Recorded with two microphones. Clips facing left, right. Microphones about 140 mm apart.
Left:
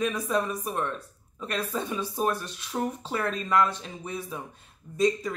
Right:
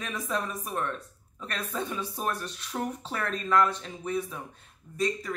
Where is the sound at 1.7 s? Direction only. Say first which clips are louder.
Left 2 dB; 15° left (ahead or behind).